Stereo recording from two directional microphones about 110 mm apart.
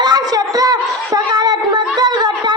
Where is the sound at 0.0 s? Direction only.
35° right (ahead or behind).